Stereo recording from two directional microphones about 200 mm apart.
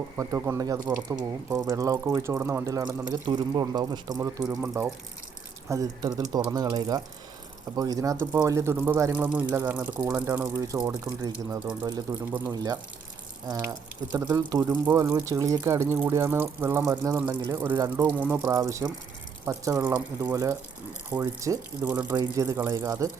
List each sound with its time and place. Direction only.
0.2 s speech: 15° right (ahead or behind)